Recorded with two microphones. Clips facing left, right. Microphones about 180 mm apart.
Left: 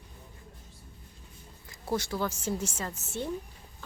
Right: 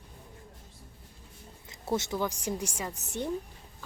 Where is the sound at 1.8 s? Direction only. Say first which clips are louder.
Right 1 dB; 20° right (ahead or behind).